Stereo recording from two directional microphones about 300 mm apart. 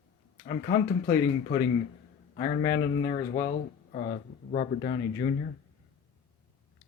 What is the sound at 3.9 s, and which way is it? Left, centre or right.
Speech, left.